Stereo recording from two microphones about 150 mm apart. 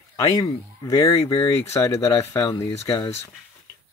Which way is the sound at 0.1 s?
25° left (ahead or behind).